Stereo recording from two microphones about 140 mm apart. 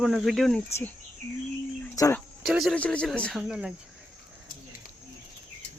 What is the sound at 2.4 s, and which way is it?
Speech, 5° right (ahead or behind).